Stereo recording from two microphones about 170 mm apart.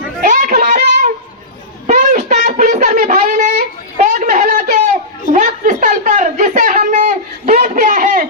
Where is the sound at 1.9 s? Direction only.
45° right (ahead or behind).